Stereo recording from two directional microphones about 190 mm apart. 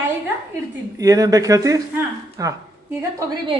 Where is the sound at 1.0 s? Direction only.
20° right (ahead or behind).